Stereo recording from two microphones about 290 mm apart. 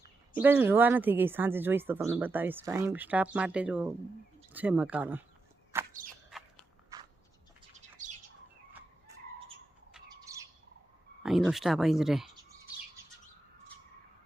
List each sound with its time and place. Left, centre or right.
0.3 s speech: centre
5.7 s a sound: centre
6.9 s biting: centre
7.8 s bird: right
10.3 s bird: centre
11.2 s speech: centre